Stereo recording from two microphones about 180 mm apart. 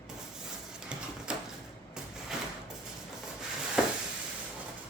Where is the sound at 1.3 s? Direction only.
5° right (ahead or behind).